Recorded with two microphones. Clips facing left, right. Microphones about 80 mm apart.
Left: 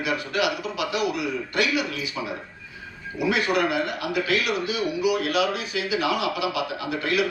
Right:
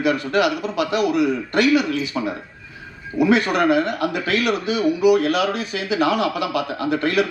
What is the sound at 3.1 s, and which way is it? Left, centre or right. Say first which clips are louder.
A man's voice: right 6 dB; right.